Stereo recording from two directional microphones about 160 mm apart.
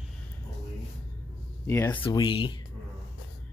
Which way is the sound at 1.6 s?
15° left (ahead or behind).